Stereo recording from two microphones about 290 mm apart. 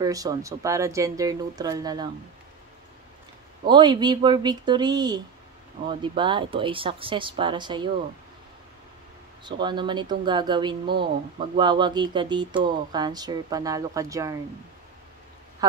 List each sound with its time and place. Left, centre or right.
0.0 s speech: centre
3.6 s speech: centre
9.4 s speech: centre